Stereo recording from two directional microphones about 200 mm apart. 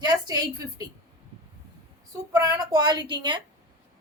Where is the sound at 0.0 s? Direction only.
20° right (ahead or behind).